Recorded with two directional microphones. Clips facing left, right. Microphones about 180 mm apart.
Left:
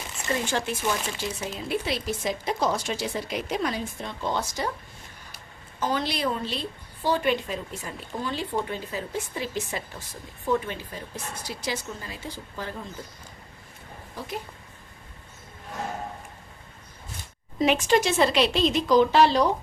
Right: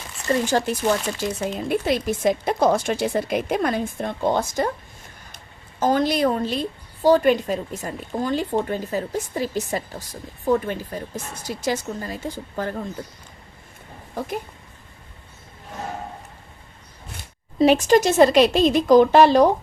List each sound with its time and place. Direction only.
0.4 s a woman's voice: 40° right (ahead or behind)
5.8 s a woman's voice: 45° right (ahead or behind)
17.6 s a woman's voice: 40° right (ahead or behind)